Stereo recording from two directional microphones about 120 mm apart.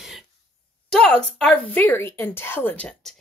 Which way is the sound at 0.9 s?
5° left (ahead or behind).